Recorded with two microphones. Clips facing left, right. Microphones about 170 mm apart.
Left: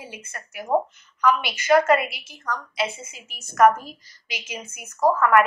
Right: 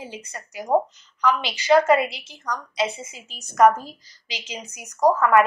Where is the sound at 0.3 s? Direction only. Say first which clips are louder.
Right 2 dB; 15° right (ahead or behind).